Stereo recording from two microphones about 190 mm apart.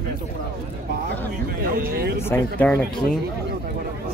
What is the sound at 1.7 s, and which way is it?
Speech, 50° right (ahead or behind).